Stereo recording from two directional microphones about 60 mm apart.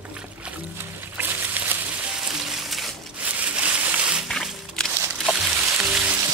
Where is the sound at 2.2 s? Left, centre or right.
Centre.